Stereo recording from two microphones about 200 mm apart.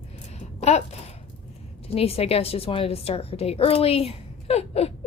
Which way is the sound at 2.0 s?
30° left (ahead or behind).